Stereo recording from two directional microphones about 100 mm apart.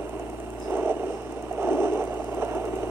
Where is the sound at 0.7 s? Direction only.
25° right (ahead or behind).